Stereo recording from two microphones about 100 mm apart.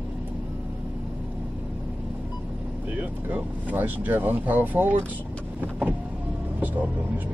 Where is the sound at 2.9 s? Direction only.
15° right (ahead or behind).